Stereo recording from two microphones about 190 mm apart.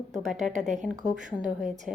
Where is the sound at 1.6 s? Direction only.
40° right (ahead or behind).